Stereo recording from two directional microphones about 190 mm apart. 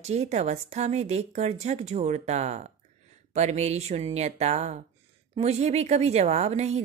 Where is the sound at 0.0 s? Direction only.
35° right (ahead or behind).